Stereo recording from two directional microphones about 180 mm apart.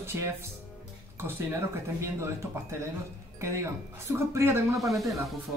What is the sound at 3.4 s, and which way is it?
Speech, 15° right (ahead or behind).